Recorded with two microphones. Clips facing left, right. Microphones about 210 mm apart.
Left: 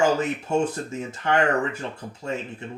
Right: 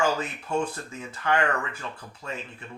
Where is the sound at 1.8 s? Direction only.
25° left (ahead or behind).